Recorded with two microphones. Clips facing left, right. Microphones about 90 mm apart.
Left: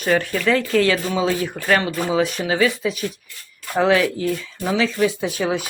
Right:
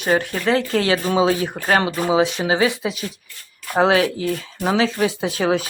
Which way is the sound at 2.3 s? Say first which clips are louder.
Right 1 dB; 25° right (ahead or behind).